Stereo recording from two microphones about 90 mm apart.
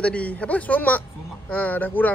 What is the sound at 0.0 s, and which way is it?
A man's voice, 15° left (ahead or behind).